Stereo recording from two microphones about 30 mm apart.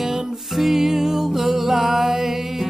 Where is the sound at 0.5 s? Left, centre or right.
Centre.